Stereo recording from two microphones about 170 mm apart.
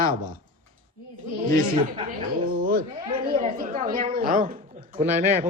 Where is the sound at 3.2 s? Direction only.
55° right (ahead or behind).